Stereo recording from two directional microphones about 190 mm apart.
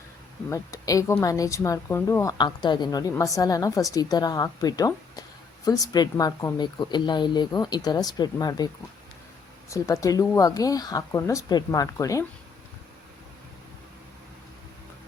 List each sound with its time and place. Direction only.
0.5 s speech: 15° left (ahead or behind)